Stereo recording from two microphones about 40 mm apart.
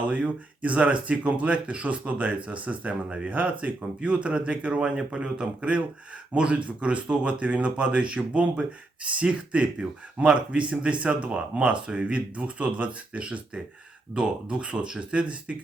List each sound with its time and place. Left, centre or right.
0.1 s speech: right